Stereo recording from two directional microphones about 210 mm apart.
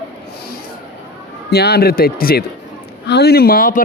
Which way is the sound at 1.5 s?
50° left (ahead or behind).